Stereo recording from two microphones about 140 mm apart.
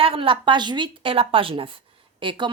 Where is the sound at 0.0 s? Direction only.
40° right (ahead or behind).